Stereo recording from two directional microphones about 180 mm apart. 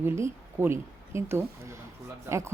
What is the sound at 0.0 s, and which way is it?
Speech, 15° right (ahead or behind).